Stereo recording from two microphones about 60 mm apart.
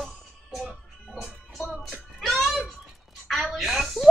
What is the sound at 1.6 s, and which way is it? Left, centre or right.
Music, centre.